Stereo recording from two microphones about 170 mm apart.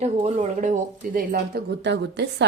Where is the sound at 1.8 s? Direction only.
90° right.